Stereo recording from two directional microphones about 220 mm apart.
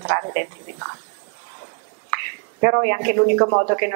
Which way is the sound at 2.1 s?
20° right (ahead or behind).